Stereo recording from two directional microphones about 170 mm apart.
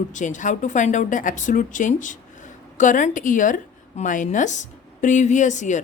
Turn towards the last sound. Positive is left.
turn(degrees=45)  # may be behind; listen again after turning